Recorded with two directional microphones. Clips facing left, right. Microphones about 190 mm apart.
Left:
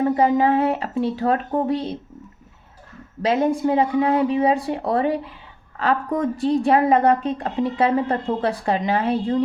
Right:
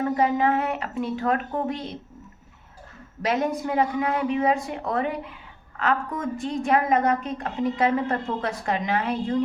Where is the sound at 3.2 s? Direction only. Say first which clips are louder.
Left 6 dB; 30° left (ahead or behind).